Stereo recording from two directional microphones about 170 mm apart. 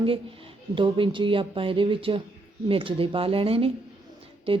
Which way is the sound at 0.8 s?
30° right (ahead or behind).